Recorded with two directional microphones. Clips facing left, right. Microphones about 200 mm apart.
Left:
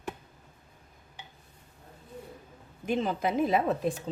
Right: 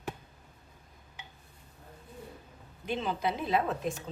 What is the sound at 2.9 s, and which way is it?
Speech, 50° left (ahead or behind).